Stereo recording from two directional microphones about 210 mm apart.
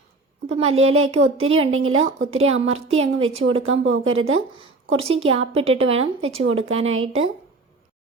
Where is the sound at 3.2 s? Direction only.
70° right (ahead or behind).